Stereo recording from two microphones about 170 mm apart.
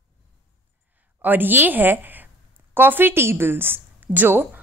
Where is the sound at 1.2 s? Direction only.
10° right (ahead or behind).